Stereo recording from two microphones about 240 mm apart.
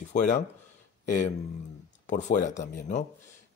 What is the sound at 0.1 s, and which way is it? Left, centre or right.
Speech, left.